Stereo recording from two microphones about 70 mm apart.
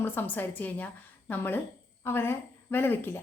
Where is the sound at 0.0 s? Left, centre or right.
Left.